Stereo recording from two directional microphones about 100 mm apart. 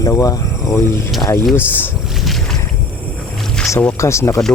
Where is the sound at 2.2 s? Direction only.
Centre (ahead or behind).